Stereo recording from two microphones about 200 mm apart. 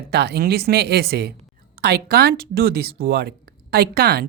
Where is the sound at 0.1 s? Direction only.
55° right (ahead or behind).